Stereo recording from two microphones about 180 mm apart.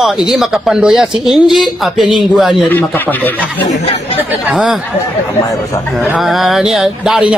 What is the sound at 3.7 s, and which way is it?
Speech, 35° left (ahead or behind).